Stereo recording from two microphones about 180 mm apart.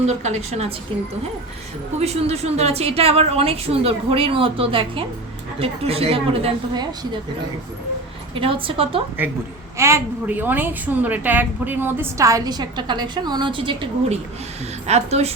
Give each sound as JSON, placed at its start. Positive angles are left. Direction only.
{"t": 0.0, "sound": "a woman's voice", "side_deg": -40}
{"t": 2.0, "sound": "a woman's voice", "side_deg": -35}
{"t": 8.4, "sound": "a woman's voice", "side_deg": -30}
{"t": 9.2, "sound": "a woman's voice", "side_deg": -10}